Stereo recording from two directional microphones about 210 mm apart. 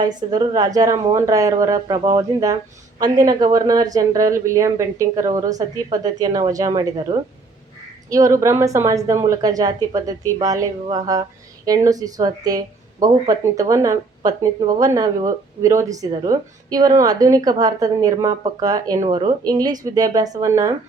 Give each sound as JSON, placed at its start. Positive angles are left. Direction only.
{"t": 0.0, "sound": "speech", "side_deg": -20}
{"t": 18.9, "sound": "a woman's voice", "side_deg": -25}